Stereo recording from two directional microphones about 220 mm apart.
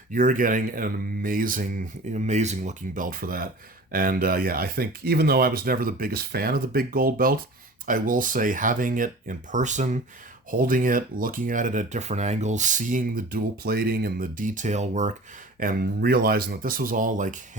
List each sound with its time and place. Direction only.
0.1 s speech: 40° right (ahead or behind)
15.6 s speech: 45° right (ahead or behind)